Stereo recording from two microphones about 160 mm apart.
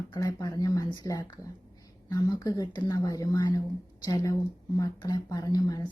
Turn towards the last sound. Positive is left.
turn(degrees=25)  # may be behind; listen again after turning